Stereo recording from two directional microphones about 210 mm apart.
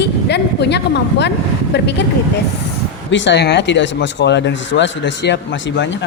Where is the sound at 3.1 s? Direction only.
60° left (ahead or behind).